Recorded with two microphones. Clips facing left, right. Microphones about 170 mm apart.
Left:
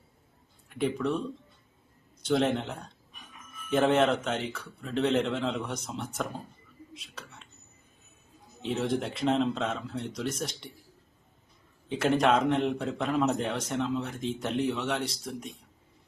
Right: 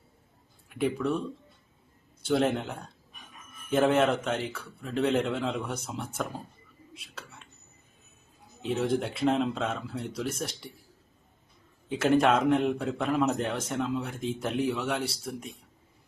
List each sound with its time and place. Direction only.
0.7 s a man's voice: 5° right (ahead or behind)
2.2 s a man's voice: 5° right (ahead or behind)
8.6 s a man's voice: centre (ahead or behind)
11.9 s a man's voice: centre (ahead or behind)